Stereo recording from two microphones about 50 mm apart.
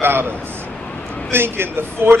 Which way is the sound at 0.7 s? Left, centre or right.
Left.